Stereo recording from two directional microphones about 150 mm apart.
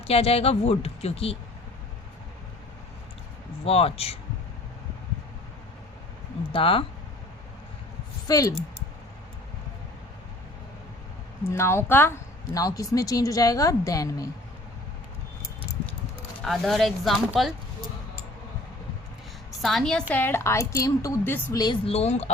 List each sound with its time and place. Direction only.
0.1 s speech: 40° left (ahead or behind)
3.7 s speech: 40° left (ahead or behind)
6.5 s speech: 35° left (ahead or behind)
8.3 s speech: 25° left (ahead or behind)
11.4 s speech: 15° left (ahead or behind)
16.4 s speech: centre (ahead or behind)
19.6 s a woman's voice: centre (ahead or behind); by 21.6 s 15° left (ahead or behind)
21.8 s speech: 45° left (ahead or behind)